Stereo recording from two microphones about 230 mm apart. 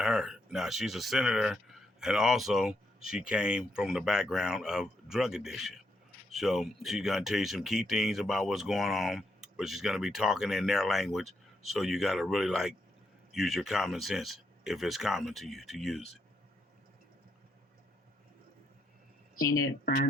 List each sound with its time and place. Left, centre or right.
0.0 s speech: centre
19.4 s speech: centre
19.8 s speech: left